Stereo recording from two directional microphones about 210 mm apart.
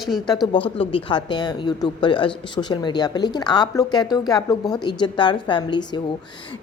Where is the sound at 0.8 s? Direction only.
25° left (ahead or behind).